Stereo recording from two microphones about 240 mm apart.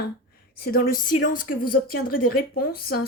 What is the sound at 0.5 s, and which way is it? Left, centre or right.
Speech, left.